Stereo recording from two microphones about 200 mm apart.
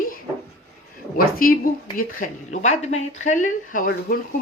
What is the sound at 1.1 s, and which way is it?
Speech, 45° left (ahead or behind).